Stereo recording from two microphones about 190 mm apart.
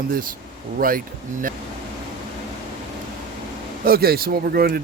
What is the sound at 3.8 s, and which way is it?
Speech, 55° right (ahead or behind).